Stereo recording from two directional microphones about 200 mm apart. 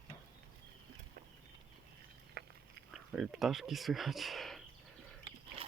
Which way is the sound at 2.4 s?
55° right (ahead or behind).